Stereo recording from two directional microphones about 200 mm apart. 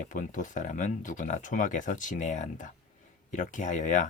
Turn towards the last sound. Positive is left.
turn(degrees=40)  # may be behind; listen again after turning